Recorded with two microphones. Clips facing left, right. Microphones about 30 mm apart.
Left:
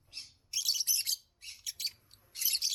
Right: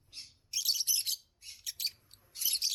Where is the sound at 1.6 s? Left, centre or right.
Centre.